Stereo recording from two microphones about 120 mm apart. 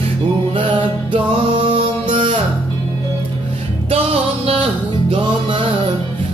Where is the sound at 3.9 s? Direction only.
55° right (ahead or behind).